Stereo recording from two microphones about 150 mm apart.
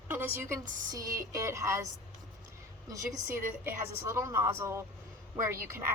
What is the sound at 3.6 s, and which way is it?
A woman's voice, 20° right (ahead or behind).